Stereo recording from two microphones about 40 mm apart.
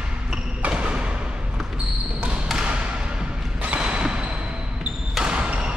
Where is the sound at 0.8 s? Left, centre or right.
Right.